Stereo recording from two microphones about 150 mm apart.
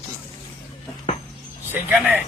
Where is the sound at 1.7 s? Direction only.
10° right (ahead or behind).